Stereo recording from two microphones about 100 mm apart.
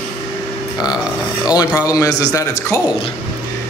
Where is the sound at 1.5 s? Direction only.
40° left (ahead or behind).